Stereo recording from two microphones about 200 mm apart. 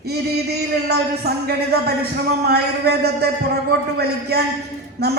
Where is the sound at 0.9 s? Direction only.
55° right (ahead or behind).